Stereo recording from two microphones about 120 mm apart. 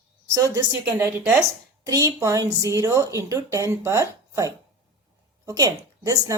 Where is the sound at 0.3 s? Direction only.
30° right (ahead or behind).